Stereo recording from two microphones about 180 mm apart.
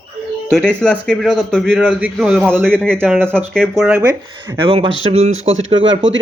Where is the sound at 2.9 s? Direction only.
10° right (ahead or behind).